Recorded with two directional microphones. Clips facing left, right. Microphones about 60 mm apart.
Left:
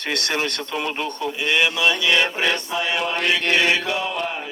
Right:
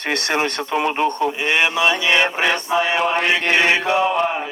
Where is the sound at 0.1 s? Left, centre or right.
Right.